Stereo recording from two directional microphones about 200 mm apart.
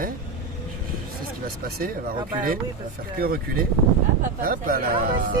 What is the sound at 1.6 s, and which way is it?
Speech, 45° right (ahead or behind).